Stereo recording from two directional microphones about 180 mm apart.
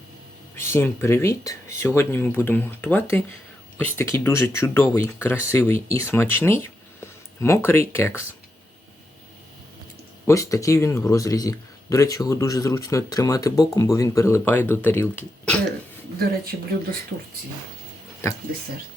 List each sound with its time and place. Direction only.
0.5 s speech: 15° left (ahead or behind)
10.2 s speech: 15° left (ahead or behind)
16.1 s speech: 65° right (ahead or behind)